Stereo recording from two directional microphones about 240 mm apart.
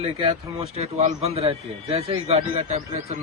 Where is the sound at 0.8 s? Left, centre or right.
Right.